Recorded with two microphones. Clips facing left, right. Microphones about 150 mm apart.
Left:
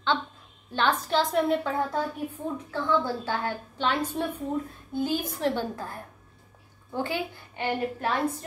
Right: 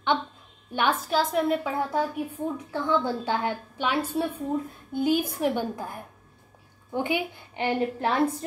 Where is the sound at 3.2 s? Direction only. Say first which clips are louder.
Right 3 dB; 15° right (ahead or behind).